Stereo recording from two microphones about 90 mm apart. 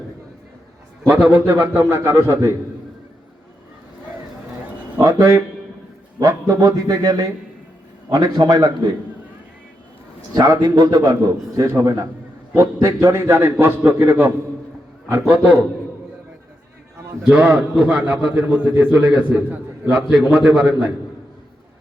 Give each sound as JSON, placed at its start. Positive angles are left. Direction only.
{"t": 1.0, "sound": "a man's voice", "side_deg": -15}
{"t": 4.9, "sound": "a man's voice", "side_deg": -30}
{"t": 10.3, "sound": "a man's voice", "side_deg": -45}
{"t": 17.2, "sound": "a man's voice", "side_deg": -10}
{"t": 18.9, "sound": "a man's voice", "side_deg": -10}
{"t": 19.3, "sound": "a man's voice", "side_deg": -20}
{"t": 19.9, "sound": "a man's voice", "side_deg": -10}